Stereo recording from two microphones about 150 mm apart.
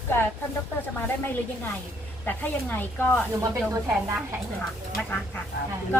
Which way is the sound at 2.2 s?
10° left (ahead or behind).